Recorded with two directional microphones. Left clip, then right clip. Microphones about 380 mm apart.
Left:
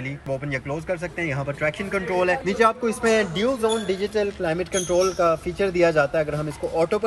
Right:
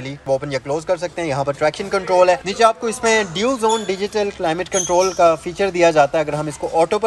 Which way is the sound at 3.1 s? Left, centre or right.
Centre.